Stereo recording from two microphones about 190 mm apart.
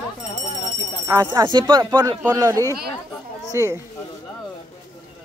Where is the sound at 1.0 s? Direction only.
20° right (ahead or behind).